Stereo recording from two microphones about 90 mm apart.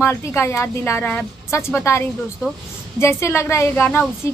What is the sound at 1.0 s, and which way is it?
Speech, 20° left (ahead or behind).